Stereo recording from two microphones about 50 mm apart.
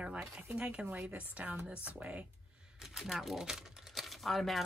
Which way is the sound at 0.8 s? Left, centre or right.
Right.